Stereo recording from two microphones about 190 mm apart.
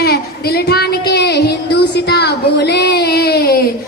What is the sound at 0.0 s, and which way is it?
Child singing, 55° left (ahead or behind).